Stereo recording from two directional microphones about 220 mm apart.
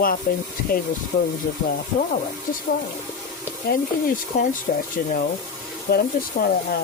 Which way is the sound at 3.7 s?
40° left (ahead or behind).